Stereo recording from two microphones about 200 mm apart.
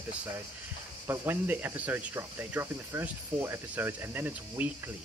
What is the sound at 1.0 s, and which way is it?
Speech, 10° right (ahead or behind).